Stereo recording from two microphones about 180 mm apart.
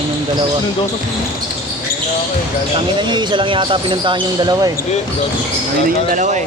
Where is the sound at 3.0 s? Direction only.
25° right (ahead or behind).